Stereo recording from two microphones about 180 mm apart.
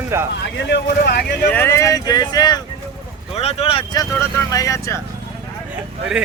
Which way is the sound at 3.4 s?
35° left (ahead or behind).